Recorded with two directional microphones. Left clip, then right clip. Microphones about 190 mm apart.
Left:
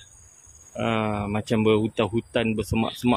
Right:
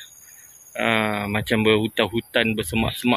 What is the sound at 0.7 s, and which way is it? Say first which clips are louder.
Speech: right 4 dB; centre (ahead or behind).